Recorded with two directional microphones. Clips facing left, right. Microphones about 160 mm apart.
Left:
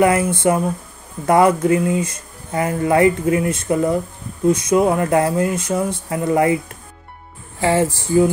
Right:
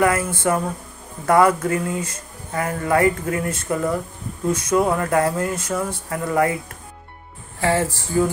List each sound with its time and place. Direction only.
0.0 s speech: 20° left (ahead or behind)
7.6 s speech: 20° left (ahead or behind)